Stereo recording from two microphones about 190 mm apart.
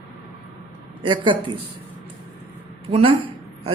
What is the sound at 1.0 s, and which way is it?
Speech, 25° right (ahead or behind).